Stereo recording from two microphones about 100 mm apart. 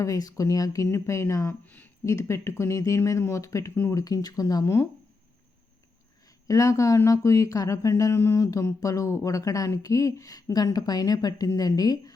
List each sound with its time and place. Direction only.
0.0 s speech: 35° left (ahead or behind)
1.6 s speech: 15° left (ahead or behind)
2.0 s speech: 30° left (ahead or behind)
6.5 s speech: 35° left (ahead or behind)